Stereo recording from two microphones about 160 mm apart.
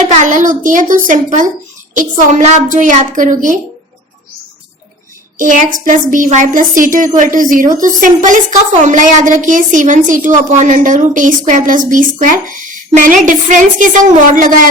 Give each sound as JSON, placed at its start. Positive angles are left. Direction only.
{"t": 0.1, "sound": "a woman's voice", "side_deg": -50}
{"t": 5.4, "sound": "a woman's voice", "side_deg": -55}